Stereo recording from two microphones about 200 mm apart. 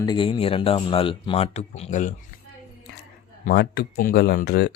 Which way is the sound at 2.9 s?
60° left (ahead or behind).